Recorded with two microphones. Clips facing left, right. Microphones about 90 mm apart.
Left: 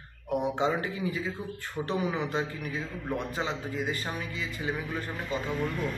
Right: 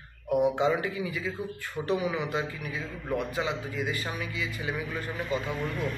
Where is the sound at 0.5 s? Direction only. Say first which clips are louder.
Right 2 dB; 30° left (ahead or behind).